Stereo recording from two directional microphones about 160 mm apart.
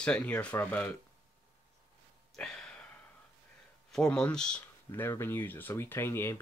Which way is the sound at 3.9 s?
5° left (ahead or behind).